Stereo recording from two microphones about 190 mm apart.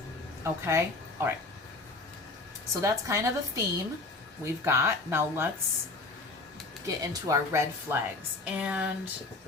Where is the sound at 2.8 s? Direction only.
15° right (ahead or behind).